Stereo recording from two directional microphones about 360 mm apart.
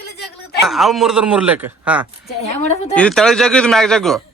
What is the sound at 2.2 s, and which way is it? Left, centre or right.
Speech, centre.